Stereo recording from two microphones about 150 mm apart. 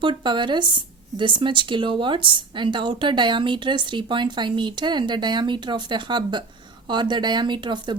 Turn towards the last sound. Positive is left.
turn(degrees=-30)  # may be behind; listen again after turning